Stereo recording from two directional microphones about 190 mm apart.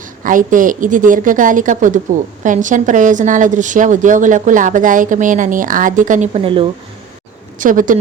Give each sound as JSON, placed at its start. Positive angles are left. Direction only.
{"t": 0.2, "sound": "a woman's voice", "side_deg": -45}
{"t": 6.4, "sound": "speech", "side_deg": -30}
{"t": 7.6, "sound": "a woman's voice", "side_deg": -45}